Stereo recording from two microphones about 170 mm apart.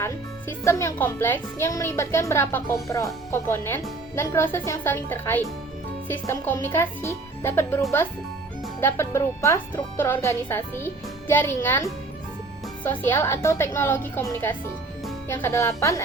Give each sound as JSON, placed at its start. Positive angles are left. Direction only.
{"t": 0.0, "sound": "speech", "side_deg": 15}
{"t": 15.3, "sound": "speech", "side_deg": 15}